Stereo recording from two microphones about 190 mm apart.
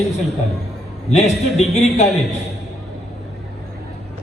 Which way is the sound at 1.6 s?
35° left (ahead or behind).